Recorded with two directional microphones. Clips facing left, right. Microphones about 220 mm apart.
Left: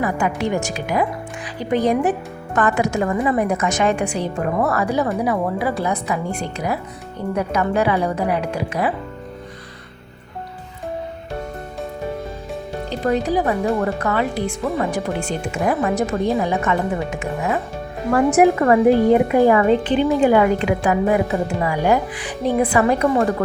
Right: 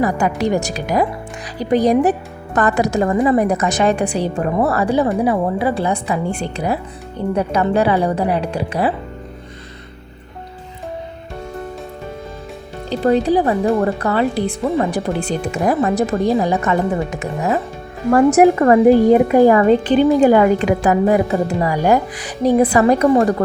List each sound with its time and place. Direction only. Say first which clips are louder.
0.0 s a woman's voice: right 4 dB; 40° right (ahead or behind)
13.1 s speech: right 4 dB; 30° right (ahead or behind)